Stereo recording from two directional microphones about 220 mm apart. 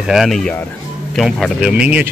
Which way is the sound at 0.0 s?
Centre (ahead or behind).